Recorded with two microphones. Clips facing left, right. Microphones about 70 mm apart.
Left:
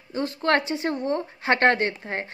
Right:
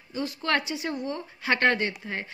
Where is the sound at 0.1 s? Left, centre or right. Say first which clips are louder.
Left 5 dB; left.